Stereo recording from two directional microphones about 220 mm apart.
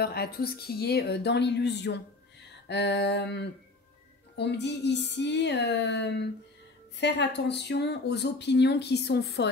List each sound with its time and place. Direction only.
0.0 s speech: 45° left (ahead or behind)